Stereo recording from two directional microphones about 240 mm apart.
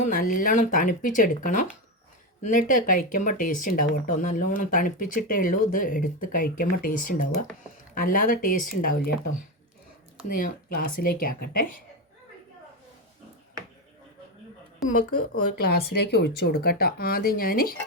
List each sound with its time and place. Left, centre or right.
0.0 s speech: left
10.3 s speech: left
14.8 s a woman's voice: centre
15.5 s speech: left